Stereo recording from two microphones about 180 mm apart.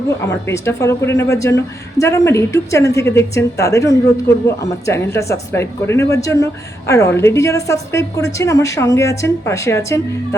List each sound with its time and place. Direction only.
0.4 s a woman's voice: 15° left (ahead or behind)